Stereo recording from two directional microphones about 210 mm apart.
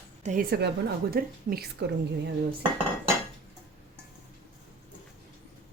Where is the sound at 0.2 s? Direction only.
35° right (ahead or behind).